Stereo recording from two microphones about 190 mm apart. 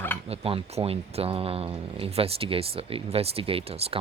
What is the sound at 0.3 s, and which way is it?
Speech, 30° right (ahead or behind).